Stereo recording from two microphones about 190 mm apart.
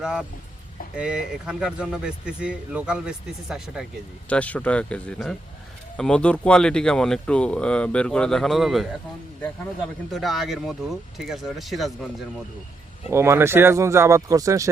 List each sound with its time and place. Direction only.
0.0 s speech: 5° right (ahead or behind)
4.3 s speech: 5° left (ahead or behind)
10.1 s speech: centre (ahead or behind)
13.1 s speech: 15° right (ahead or behind)